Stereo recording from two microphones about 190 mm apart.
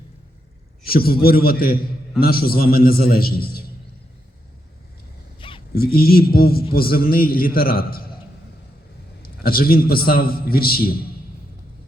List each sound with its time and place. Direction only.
0.9 s a man's voice: 50° left (ahead or behind)
5.4 s zipper: 25° left (ahead or behind)
5.7 s a man's voice: 55° left (ahead or behind)
9.4 s a man's voice: 50° left (ahead or behind)